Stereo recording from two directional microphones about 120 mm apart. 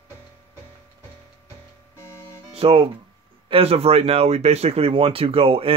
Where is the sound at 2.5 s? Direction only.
50° right (ahead or behind).